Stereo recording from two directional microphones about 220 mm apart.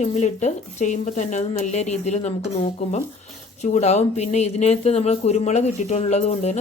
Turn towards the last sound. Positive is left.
turn(degrees=30)  # may be behind; listen again after turning